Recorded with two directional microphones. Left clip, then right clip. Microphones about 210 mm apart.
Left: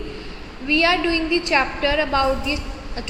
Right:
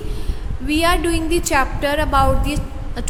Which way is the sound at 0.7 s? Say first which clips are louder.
Even; 30° right (ahead or behind).